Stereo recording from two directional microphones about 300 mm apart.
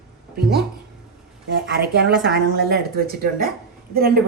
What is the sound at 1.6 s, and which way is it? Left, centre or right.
Speech, right.